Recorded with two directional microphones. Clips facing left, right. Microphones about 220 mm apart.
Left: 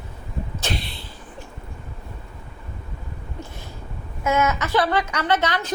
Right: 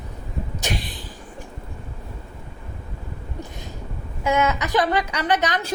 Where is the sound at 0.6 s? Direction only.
15° right (ahead or behind).